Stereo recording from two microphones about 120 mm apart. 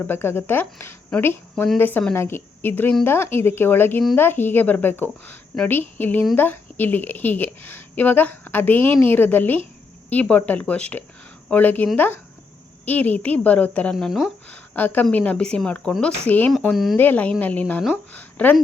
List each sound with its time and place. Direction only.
0.0 s a woman's voice: 20° left (ahead or behind)
13.9 s speech: centre (ahead or behind)
14.4 s a woman's voice: 15° left (ahead or behind)
16.6 s speech: centre (ahead or behind)
17.0 s a woman's voice: 15° left (ahead or behind)